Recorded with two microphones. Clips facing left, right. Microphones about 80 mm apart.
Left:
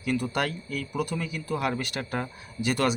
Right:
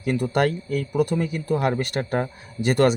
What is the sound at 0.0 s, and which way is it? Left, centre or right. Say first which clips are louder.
Speech: right 6 dB; right.